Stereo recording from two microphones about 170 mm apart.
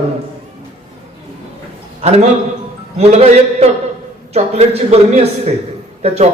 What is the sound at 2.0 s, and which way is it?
A man's voice, 40° right (ahead or behind).